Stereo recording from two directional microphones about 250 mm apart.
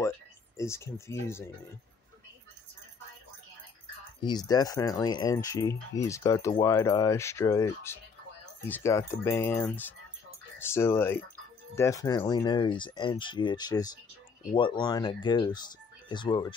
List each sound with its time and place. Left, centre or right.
0.6 s speech: centre
4.2 s speech: centre